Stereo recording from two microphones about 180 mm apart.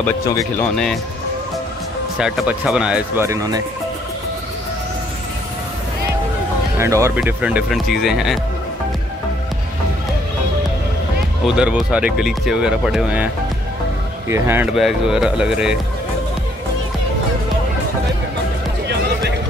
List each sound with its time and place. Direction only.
0.0 s speech: 15° left (ahead or behind)
2.1 s speech: 5° right (ahead or behind)
3.3 s speech: 20° right (ahead or behind)
6.8 s speech: 15° right (ahead or behind)
11.4 s speech: 5° right (ahead or behind)
14.3 s speech: 15° right (ahead or behind)